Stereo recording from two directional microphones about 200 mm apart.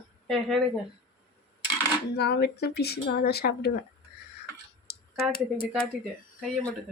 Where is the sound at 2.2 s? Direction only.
55° left (ahead or behind).